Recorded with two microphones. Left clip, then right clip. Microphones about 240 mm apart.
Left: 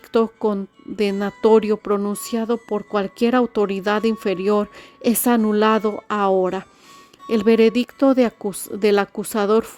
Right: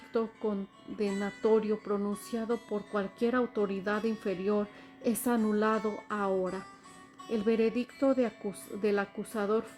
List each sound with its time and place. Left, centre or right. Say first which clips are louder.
0.1 s speech: left 13 dB; left